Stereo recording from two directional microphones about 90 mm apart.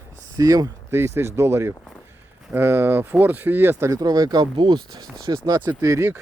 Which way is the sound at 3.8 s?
45° right (ahead or behind).